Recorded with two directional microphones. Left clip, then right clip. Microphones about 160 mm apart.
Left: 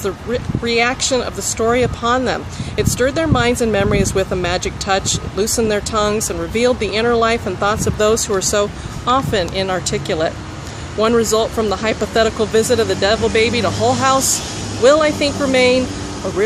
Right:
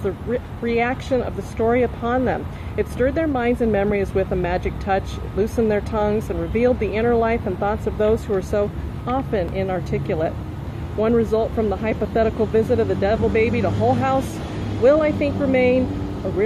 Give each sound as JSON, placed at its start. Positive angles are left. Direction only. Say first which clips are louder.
{"t": 0.6, "sound": "speech", "louder": "left 6 dB", "side_deg": 20}
{"t": 14.8, "sound": "speech", "louder": "left 4 dB", "side_deg": 20}